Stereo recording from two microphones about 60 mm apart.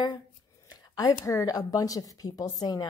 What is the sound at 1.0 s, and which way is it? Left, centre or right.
Speech, left.